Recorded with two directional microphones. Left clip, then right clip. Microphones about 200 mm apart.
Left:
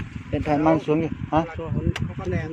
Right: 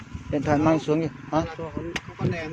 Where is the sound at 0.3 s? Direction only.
5° right (ahead or behind); by 1.5 s 15° left (ahead or behind).